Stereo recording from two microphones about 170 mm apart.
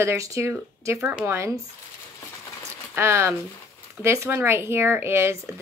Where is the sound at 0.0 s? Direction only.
15° right (ahead or behind).